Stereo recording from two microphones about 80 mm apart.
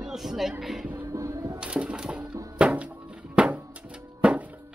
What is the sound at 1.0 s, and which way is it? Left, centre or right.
Music, right.